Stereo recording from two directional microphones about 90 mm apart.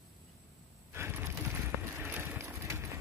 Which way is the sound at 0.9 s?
25° right (ahead or behind).